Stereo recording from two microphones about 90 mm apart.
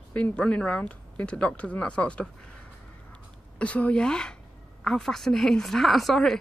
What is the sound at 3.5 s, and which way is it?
Speech, 15° left (ahead or behind).